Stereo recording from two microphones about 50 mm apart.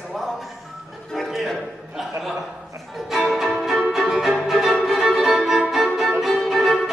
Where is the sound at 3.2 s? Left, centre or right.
Centre.